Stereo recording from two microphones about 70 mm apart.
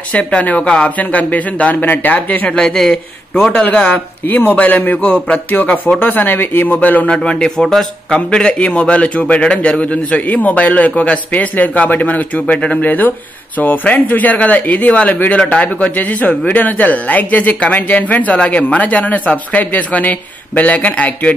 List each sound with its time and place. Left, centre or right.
0.1 s speech: centre
2.5 s a man's voice: centre
3.6 s speech: left